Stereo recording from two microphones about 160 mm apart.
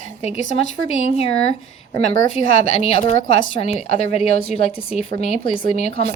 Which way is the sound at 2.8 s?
40° left (ahead or behind).